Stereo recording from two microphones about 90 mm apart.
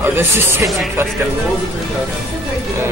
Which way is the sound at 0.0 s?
25° right (ahead or behind).